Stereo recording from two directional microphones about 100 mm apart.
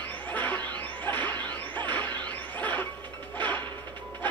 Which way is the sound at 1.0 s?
15° left (ahead or behind).